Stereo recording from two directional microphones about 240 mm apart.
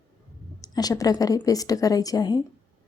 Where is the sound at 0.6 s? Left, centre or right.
Centre.